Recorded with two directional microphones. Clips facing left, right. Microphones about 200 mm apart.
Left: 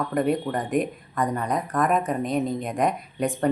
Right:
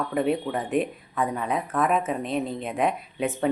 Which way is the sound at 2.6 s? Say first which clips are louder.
Left 1 dB; 5° right (ahead or behind).